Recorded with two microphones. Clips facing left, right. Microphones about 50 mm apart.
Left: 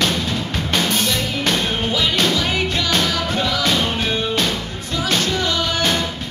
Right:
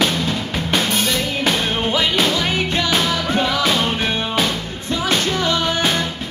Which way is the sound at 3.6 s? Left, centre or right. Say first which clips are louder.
Right 1 dB; centre.